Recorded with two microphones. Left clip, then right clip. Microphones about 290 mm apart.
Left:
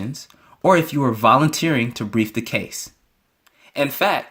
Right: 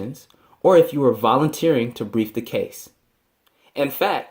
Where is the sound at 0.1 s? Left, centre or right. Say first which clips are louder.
Left 4 dB; left.